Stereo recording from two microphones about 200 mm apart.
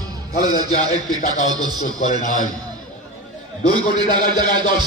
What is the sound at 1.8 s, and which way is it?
Speech, 40° left (ahead or behind).